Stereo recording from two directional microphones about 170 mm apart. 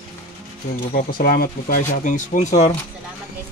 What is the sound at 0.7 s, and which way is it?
Speech, 55° left (ahead or behind).